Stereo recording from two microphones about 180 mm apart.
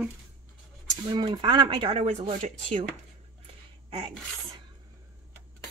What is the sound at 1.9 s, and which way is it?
Speech, 35° right (ahead or behind).